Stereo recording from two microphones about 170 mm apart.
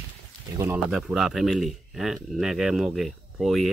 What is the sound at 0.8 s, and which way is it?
Speech, centre (ahead or behind).